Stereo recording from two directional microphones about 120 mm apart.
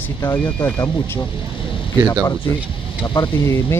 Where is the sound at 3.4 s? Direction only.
20° left (ahead or behind).